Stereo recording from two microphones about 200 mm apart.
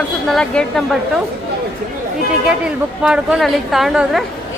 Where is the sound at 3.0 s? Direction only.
5° right (ahead or behind).